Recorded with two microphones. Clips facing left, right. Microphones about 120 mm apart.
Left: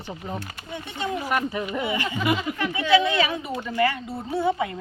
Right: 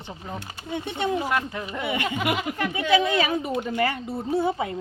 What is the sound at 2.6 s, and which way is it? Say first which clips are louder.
Speech: left 1 dB; 45° right (ahead or behind).